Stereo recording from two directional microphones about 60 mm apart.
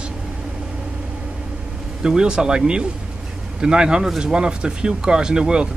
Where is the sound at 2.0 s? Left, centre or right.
Centre.